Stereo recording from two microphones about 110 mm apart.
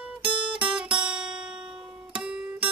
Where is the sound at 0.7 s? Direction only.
10° right (ahead or behind).